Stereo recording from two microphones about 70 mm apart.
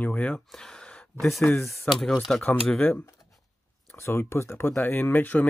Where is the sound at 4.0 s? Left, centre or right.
Left.